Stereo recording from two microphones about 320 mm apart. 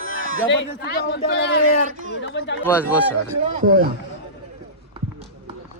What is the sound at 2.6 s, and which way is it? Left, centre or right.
Speech, centre.